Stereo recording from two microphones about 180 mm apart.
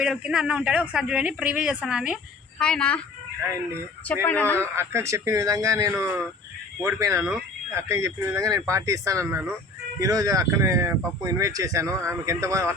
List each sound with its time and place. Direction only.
0.0 s speech: 5° right (ahead or behind)
4.1 s speech: 10° left (ahead or behind)
4.5 s speech: 15° right (ahead or behind)